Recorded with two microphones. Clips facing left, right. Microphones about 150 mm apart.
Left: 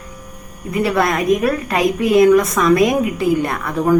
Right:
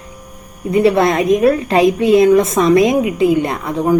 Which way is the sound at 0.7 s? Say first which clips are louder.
Right 5 dB; 25° right (ahead or behind).